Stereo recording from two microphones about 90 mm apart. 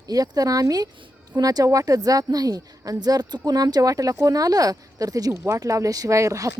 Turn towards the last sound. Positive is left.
turn(degrees=-35)  # may be behind; listen again after turning